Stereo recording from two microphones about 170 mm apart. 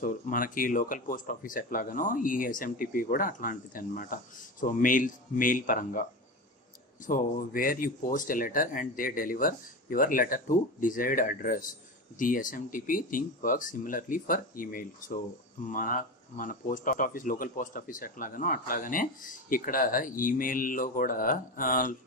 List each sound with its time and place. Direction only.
0.0 s speech: 55° left (ahead or behind)
7.1 s speech: 55° left (ahead or behind)